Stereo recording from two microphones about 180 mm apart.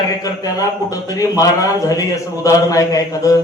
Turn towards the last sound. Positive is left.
turn(degrees=20)  # may be behind; listen again after turning